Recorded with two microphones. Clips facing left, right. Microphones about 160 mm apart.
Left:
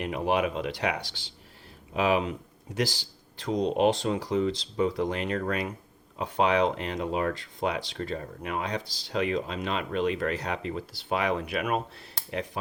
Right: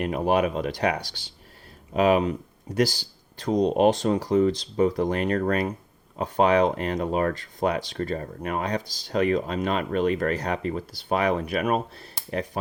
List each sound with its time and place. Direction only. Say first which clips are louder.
0.0 s speech: right 4 dB; 45° right (ahead or behind)